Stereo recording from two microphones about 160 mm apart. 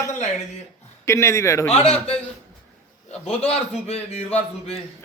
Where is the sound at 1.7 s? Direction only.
40° left (ahead or behind).